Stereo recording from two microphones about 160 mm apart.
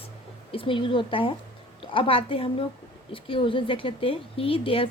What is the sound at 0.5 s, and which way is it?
A woman's voice, 35° left (ahead or behind).